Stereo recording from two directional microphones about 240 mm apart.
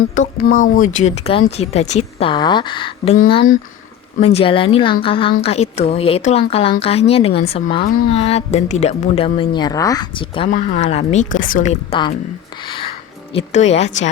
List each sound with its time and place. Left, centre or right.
0.1 s a woman's voice: left
12.6 s music: left
13.3 s a woman's voice: left